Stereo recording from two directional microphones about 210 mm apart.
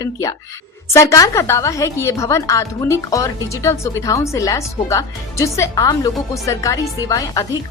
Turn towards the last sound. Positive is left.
turn(degrees=15)  # may be behind; listen again after turning